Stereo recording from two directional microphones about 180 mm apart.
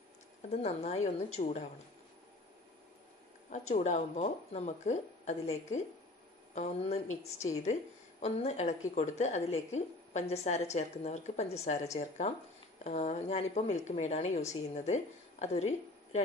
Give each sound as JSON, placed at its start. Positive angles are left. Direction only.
{"t": 0.5, "sound": "a woman's voice", "side_deg": 35}
{"t": 3.4, "sound": "a woman's voice", "side_deg": 40}